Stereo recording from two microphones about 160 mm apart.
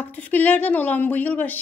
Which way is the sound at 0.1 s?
10° left (ahead or behind).